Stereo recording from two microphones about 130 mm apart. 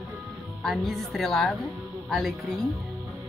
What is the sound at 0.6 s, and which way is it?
Speech, centre (ahead or behind).